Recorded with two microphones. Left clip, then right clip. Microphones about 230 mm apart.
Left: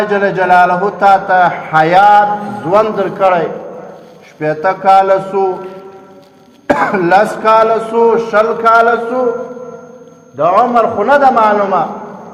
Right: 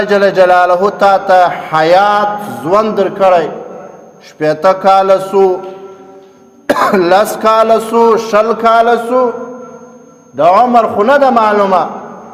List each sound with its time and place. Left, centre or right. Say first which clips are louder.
0.1 s a man's voice: right 5 dB; right
6.7 s a man's voice: right 2 dB; right
10.3 s a man's voice: right 3 dB; right